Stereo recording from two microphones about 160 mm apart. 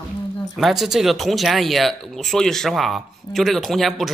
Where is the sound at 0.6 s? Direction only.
Centre (ahead or behind).